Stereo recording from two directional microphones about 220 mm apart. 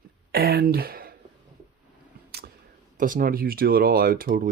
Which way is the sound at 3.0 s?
40° right (ahead or behind).